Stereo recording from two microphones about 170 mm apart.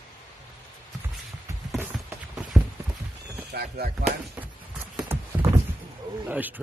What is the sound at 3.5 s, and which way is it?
Speech, 70° right (ahead or behind).